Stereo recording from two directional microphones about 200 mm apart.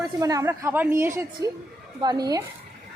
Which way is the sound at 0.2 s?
15° right (ahead or behind).